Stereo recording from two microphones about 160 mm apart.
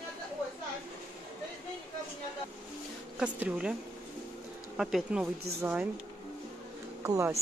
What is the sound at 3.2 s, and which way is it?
Speech, 5° right (ahead or behind).